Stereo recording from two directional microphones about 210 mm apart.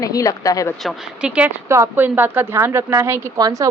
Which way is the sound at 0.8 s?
Centre (ahead or behind).